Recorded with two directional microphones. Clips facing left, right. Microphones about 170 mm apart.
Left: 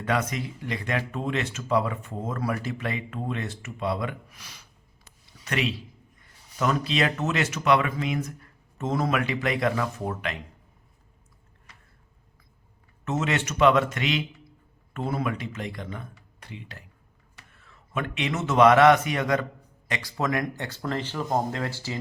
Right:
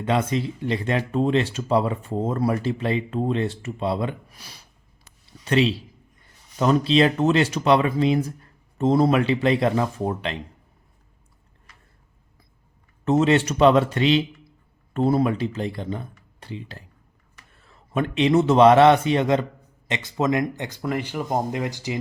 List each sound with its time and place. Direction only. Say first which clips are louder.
0.0 s speech: right 5 dB; 25° right (ahead or behind)
13.1 s a man's voice: right 9 dB; 30° right (ahead or behind); by 21.9 s 15° right (ahead or behind)